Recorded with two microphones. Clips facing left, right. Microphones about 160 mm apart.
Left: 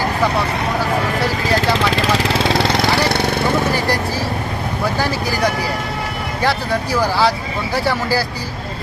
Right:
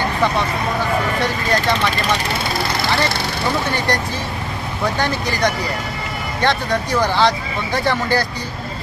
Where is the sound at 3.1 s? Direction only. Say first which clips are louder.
Left 6 dB; 55° left (ahead or behind).